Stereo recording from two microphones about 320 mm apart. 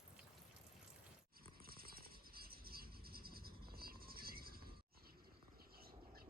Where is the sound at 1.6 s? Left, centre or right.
Right.